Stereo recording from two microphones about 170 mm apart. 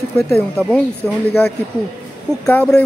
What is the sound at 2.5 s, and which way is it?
Speech, 10° left (ahead or behind).